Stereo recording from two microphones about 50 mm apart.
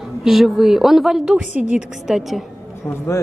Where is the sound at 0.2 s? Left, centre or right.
Centre.